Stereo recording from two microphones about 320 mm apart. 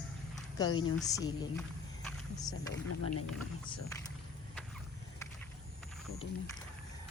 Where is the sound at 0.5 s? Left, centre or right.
Centre.